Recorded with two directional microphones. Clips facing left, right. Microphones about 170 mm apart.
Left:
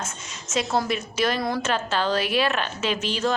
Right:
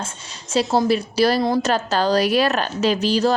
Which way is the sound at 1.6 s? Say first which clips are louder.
Right 5 dB; 40° right (ahead or behind).